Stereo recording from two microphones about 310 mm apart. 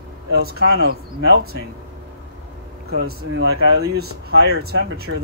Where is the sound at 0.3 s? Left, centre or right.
Right.